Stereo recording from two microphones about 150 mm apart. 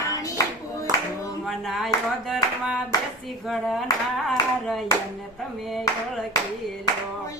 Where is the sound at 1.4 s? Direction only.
Centre (ahead or behind).